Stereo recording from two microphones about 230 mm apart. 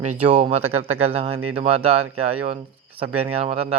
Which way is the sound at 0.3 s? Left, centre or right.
Right.